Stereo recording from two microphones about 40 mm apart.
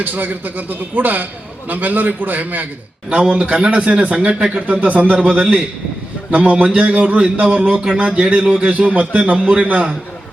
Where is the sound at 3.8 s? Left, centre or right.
Right.